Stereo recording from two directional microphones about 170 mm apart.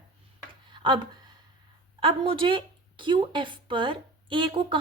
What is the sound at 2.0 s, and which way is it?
Speech, 30° right (ahead or behind).